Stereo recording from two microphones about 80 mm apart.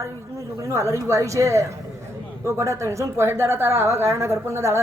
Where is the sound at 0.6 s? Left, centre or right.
Right.